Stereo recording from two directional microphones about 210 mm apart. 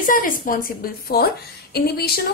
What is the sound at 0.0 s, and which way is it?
A woman's voice, 40° left (ahead or behind).